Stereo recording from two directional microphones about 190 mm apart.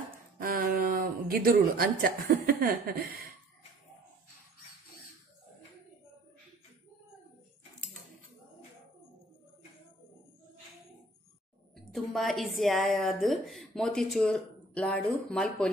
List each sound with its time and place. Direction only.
0.4 s speech: 50° right (ahead or behind)
11.7 s a woman's voice: centre (ahead or behind)